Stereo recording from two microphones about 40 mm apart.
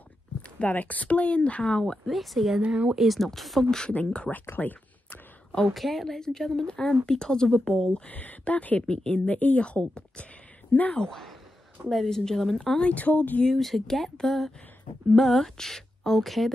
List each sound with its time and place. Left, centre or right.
0.6 s speech: left
2.0 s speech: centre
2.6 s speech: right
3.0 s speech: centre
4.0 s speech: left
5.7 s a woman's voice: centre; by 8.1 s left
8.1 s speech: left
8.8 s speech: left
9.3 s a woman's voice: left
11.0 s a woman's voice: centre
12.8 s speech: left
13.5 s a woman's voice: centre